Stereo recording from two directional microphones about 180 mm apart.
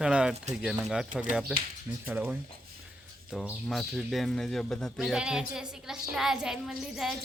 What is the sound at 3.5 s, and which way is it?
Speech, centre (ahead or behind).